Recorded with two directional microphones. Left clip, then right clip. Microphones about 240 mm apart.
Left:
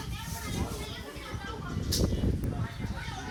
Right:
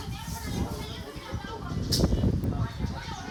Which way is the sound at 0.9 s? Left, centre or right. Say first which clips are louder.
Right 1 dB; right.